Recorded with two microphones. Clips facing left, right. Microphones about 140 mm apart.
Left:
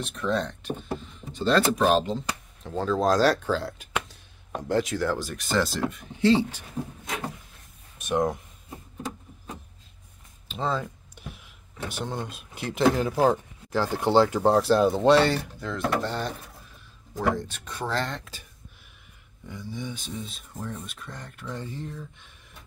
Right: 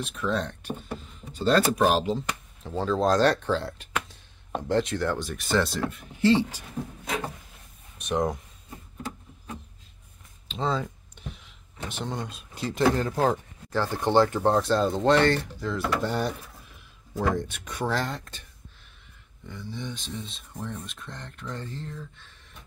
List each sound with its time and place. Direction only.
0.0 s speech: centre (ahead or behind)
8.0 s speech: centre (ahead or behind)
10.5 s a sound: centre (ahead or behind)
12.4 s speech: 65° left (ahead or behind)
12.7 s speech: 5° left (ahead or behind)
16.1 s speech: 10° right (ahead or behind)
17.5 s speech: 15° right (ahead or behind)
18.2 s speech: 5° left (ahead or behind)
19.5 s speech: 10° left (ahead or behind)